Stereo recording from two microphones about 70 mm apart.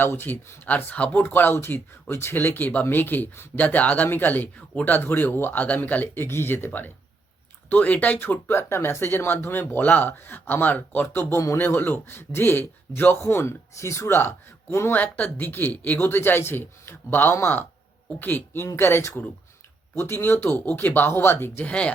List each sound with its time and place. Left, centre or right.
0.0 s speech: left
0.6 s speech: left
6.2 s a man's voice: left
14.9 s speech: left
20.4 s speech: left
21.6 s speech: centre